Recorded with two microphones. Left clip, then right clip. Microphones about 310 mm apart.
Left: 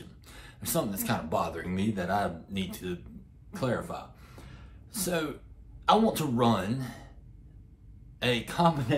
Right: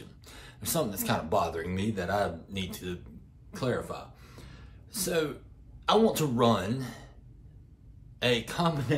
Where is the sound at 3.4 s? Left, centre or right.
Centre.